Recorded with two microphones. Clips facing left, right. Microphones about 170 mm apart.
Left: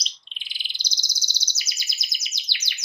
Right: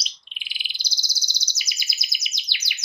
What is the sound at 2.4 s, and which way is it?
Chirp, 15° right (ahead or behind).